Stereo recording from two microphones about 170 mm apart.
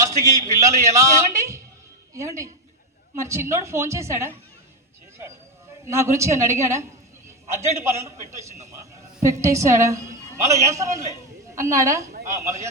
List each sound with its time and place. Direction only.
0.0 s a man's voice: 20° right (ahead or behind)
5.8 s a man's voice: 15° right (ahead or behind)